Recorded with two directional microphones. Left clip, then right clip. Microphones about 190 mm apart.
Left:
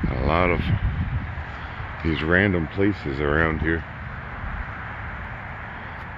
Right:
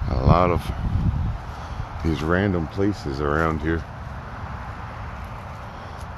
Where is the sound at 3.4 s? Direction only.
10° right (ahead or behind).